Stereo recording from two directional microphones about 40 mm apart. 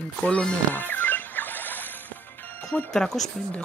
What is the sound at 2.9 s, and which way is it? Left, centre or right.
Speech, centre.